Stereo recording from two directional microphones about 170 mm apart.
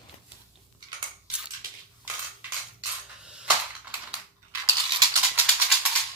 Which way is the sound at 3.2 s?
5° right (ahead or behind).